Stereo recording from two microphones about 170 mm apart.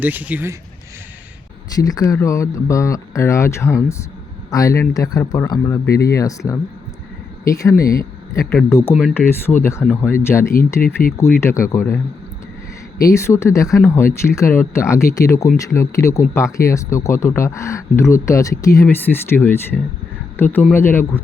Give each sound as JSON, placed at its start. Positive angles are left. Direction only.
{"t": 0.0, "sound": "speech", "side_deg": -10}
{"t": 1.7, "sound": "speech", "side_deg": 20}
{"t": 8.4, "sound": "speech", "side_deg": 5}
{"t": 10.8, "sound": "speech", "side_deg": 60}
{"t": 11.3, "sound": "speech", "side_deg": 15}
{"t": 13.0, "sound": "speech", "side_deg": 20}